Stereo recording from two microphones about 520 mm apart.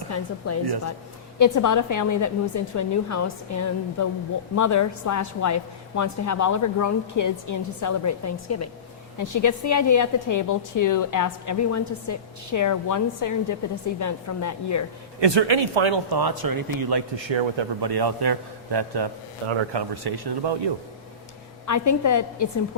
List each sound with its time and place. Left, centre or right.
0.1 s a woman's voice: left
15.2 s speech: right
16.1 s speech: right
17.2 s a man's voice: right
21.7 s a woman's voice: left